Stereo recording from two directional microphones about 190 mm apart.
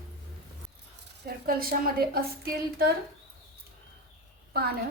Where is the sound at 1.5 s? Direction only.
50° right (ahead or behind).